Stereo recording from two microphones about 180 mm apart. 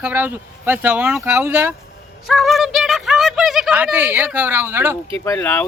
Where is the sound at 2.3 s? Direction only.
Centre (ahead or behind).